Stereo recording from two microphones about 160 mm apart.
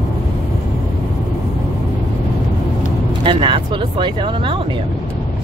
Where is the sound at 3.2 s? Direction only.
30° right (ahead or behind).